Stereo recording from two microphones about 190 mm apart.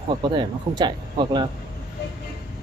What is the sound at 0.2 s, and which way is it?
Speech, 25° right (ahead or behind).